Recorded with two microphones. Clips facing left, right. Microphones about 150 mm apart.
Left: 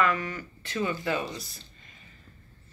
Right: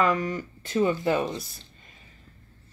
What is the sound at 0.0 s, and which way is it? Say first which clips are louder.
Speech: right 3 dB; 40° right (ahead or behind).